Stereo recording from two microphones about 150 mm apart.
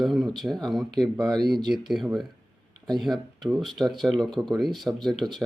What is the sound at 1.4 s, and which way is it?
Speech, 90° right.